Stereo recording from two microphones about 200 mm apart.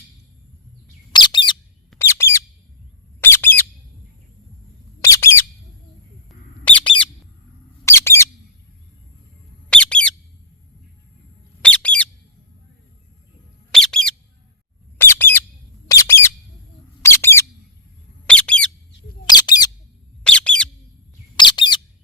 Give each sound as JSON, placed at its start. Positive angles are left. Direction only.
{"t": 1.1, "sound": "bird", "side_deg": 20}
{"t": 2.0, "sound": "bird", "side_deg": 10}
{"t": 4.9, "sound": "bird", "side_deg": 15}
{"t": 9.6, "sound": "bird", "side_deg": 5}
{"t": 11.6, "sound": "bird", "side_deg": 5}
{"t": 13.7, "sound": "bird", "side_deg": 0}
{"t": 19.3, "sound": "bird", "side_deg": 20}
{"t": 20.2, "sound": "bird", "side_deg": 5}
{"t": 21.3, "sound": "bird", "side_deg": 20}